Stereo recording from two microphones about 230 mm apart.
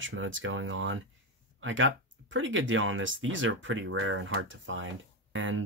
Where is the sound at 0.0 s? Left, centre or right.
Right.